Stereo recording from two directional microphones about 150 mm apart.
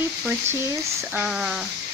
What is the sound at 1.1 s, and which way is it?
Speech, 5° right (ahead or behind).